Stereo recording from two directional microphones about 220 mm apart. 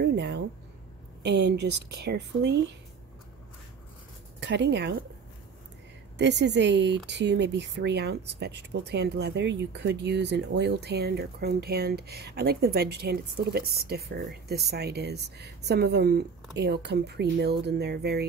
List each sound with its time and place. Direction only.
0.0 s a sound: 50° right (ahead or behind)
1.2 s speech: 50° right (ahead or behind)
4.4 s speech: 55° right (ahead or behind)
6.1 s speech: 50° right (ahead or behind)